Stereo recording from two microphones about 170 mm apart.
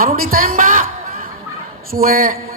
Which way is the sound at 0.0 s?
60° right (ahead or behind).